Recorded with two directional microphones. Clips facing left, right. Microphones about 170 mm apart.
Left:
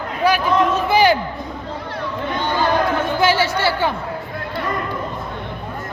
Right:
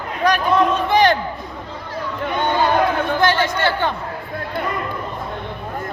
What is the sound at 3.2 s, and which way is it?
Speech, 5° left (ahead or behind).